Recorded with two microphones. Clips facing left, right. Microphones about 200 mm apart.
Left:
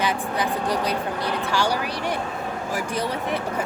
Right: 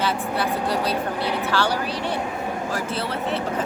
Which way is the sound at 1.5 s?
10° left (ahead or behind).